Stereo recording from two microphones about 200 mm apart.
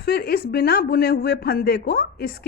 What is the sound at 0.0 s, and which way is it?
Speech, 50° left (ahead or behind).